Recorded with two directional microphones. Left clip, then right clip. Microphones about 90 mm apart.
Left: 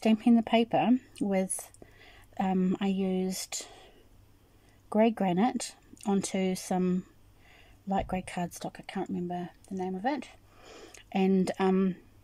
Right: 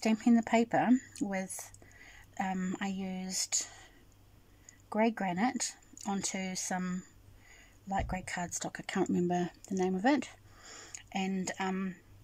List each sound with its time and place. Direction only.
0.0 s speech: 35° left (ahead or behind)
8.7 s speech: centre (ahead or behind)
10.6 s a sound: 45° left (ahead or behind)